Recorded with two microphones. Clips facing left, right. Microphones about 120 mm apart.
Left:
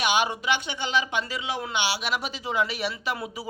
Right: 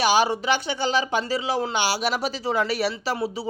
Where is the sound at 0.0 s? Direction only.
35° right (ahead or behind).